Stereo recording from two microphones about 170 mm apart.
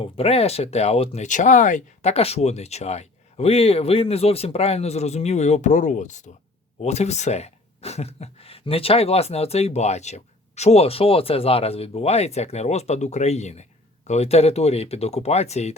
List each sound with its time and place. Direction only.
0.0 s speech: 35° left (ahead or behind)